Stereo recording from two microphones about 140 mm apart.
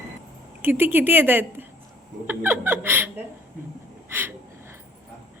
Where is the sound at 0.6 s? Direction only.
15° right (ahead or behind).